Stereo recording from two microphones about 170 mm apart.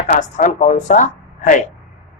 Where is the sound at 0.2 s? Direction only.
50° left (ahead or behind).